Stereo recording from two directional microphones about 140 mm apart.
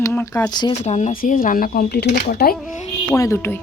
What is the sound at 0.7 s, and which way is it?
Speech, 55° left (ahead or behind).